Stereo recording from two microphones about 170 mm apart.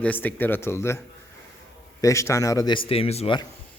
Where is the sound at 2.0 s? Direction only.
20° left (ahead or behind).